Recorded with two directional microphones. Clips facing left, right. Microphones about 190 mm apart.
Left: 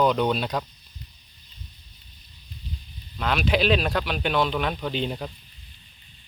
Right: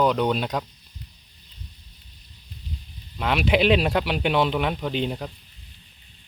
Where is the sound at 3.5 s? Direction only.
20° right (ahead or behind); by 5.3 s 5° right (ahead or behind).